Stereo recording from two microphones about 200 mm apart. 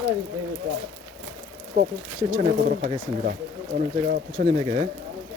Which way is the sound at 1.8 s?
45° right (ahead or behind).